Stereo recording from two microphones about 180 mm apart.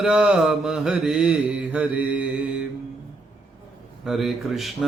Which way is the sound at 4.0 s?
Centre (ahead or behind).